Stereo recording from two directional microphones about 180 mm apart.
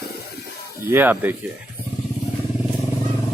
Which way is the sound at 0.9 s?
10° right (ahead or behind).